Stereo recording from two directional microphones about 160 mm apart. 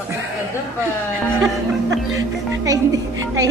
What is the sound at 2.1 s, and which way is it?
Speech, 20° right (ahead or behind).